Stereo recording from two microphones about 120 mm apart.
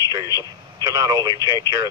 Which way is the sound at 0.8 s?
35° right (ahead or behind).